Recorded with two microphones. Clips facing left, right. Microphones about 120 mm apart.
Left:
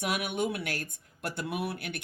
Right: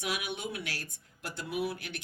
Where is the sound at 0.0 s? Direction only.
55° left (ahead or behind).